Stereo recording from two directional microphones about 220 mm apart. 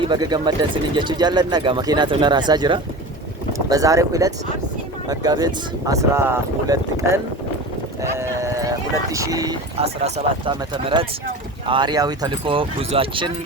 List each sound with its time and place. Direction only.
0.0 s speech: 20° right (ahead or behind)
8.1 s clip-clop: 15° right (ahead or behind)
9.1 s speech: 15° right (ahead or behind)
9.7 s speech: 25° right (ahead or behind)